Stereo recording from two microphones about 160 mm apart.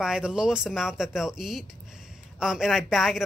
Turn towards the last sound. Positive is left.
turn(degrees=0)  # may be behind; listen again after turning